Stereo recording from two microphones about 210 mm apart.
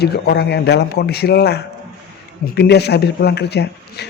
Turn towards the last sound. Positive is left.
turn(degrees=50)  # may be behind; listen again after turning